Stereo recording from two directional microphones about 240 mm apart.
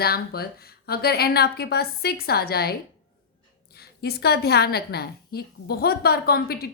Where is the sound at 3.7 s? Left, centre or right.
Left.